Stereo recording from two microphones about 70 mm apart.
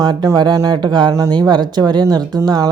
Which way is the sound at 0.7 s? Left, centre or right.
Right.